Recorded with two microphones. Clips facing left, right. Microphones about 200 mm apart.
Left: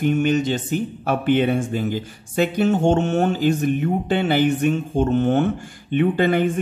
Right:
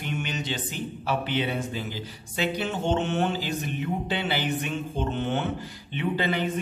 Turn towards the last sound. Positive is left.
turn(degrees=50)  # may be behind; listen again after turning